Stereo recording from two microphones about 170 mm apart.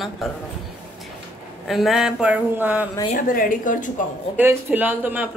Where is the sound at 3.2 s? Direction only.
55° left (ahead or behind).